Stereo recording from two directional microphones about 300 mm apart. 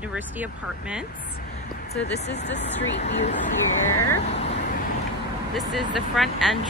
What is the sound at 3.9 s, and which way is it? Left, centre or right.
Speech, left.